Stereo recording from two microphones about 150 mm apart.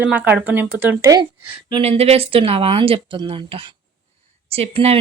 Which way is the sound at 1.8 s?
45° right (ahead or behind).